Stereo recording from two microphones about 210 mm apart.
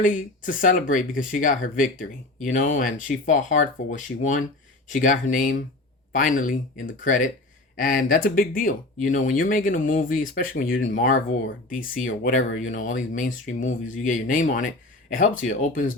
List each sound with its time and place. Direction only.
0.0 s speech: 40° left (ahead or behind)